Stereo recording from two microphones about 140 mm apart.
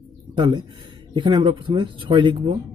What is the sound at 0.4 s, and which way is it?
Speech, 35° right (ahead or behind).